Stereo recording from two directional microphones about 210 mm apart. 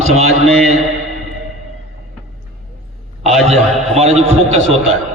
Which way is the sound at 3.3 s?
30° right (ahead or behind).